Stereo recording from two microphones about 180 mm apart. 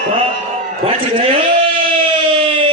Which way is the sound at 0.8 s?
30° right (ahead or behind).